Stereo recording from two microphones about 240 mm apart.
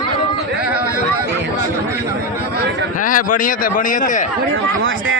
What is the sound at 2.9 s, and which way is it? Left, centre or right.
A man's voice, left.